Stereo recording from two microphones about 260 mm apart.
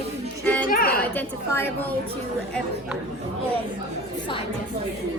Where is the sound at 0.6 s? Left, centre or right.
Left.